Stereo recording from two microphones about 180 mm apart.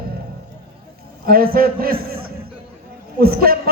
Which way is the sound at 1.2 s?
55° right (ahead or behind).